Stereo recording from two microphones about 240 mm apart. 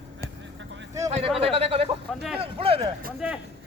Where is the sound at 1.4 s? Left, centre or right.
Right.